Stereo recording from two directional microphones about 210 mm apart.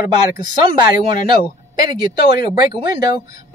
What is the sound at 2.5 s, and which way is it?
Speech, 20° right (ahead or behind).